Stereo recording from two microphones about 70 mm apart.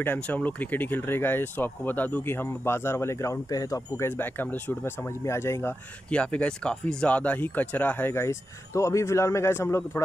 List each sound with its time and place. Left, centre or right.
0.0 s speech: left
4.2 s speech: left
5.2 s speech: left
6.0 s speech: centre
8.1 s speech: left